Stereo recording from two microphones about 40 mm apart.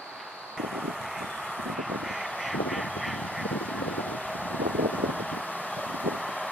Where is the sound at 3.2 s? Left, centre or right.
Left.